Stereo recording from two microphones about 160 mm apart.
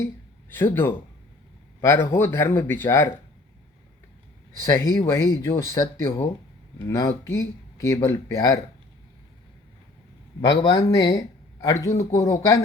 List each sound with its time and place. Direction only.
0.5 s speech: 15° left (ahead or behind)
4.6 s speech: 20° left (ahead or behind)
10.4 s speech: 30° left (ahead or behind)